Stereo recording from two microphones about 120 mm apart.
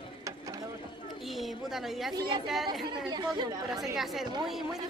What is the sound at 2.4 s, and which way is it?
Speech, centre (ahead or behind).